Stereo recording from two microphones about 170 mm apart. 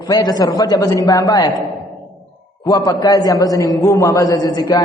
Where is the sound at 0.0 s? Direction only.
20° left (ahead or behind).